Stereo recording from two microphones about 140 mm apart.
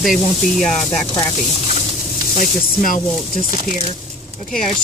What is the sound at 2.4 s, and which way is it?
Speech, 75° left (ahead or behind).